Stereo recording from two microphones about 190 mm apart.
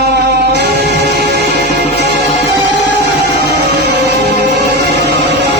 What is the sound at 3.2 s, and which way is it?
Music, 60° right (ahead or behind).